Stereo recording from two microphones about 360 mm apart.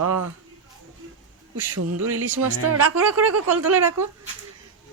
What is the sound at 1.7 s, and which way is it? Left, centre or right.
Speech, right.